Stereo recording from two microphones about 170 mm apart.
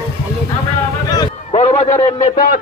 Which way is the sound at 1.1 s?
25° left (ahead or behind).